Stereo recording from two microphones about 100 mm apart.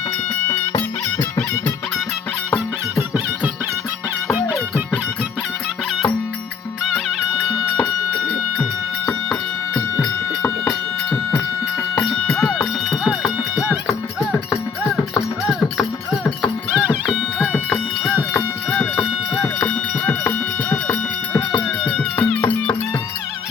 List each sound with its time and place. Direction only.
4.4 s music: 15° right (ahead or behind)
6.9 s music: 5° right (ahead or behind)
9.0 s music: 10° left (ahead or behind)
16.7 s music: 10° right (ahead or behind)
17.7 s music: 10° left (ahead or behind)
22.4 s music: 20° left (ahead or behind)